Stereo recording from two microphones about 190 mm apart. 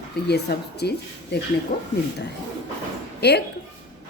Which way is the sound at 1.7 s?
45° left (ahead or behind).